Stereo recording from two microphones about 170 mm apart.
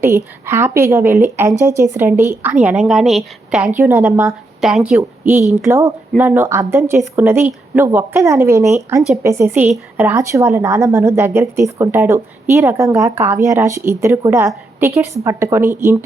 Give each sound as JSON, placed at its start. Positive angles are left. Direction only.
{"t": 0.0, "sound": "a woman's voice", "side_deg": -15}
{"t": 4.0, "sound": "a woman's voice", "side_deg": -5}